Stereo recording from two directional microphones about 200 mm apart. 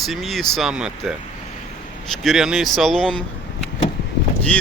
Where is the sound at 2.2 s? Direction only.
Centre (ahead or behind).